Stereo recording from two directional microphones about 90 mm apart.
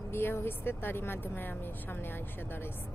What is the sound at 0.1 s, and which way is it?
Speech, 25° left (ahead or behind).